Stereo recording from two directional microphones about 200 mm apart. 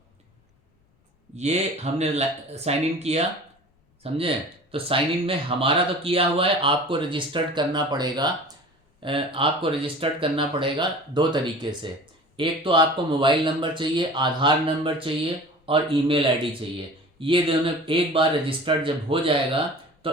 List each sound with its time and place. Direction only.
1.4 s speech: 35° right (ahead or behind)